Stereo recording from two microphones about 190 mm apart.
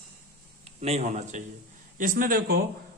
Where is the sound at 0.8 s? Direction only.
35° right (ahead or behind).